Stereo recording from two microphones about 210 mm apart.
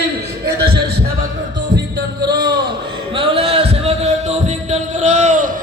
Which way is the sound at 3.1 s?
25° right (ahead or behind).